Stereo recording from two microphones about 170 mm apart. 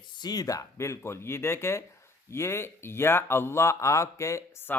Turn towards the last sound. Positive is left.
turn(degrees=15)  # may be behind; listen again after turning